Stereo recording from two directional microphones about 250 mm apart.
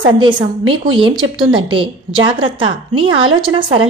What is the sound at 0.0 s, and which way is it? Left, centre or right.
A woman's voice, centre.